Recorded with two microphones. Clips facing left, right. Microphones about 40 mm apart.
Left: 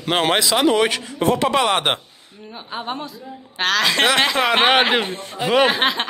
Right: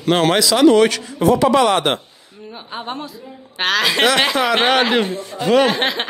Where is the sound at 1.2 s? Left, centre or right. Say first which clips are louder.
Right 4 dB; left.